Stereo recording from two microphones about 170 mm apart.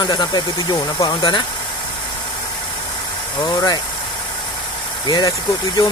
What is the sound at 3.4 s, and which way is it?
Speech, 25° left (ahead or behind).